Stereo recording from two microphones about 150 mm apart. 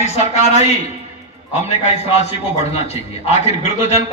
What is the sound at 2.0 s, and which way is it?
A man's voice, 45° left (ahead or behind).